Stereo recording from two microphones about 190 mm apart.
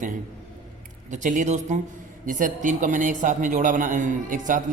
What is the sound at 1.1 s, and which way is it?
A man's voice, 40° right (ahead or behind).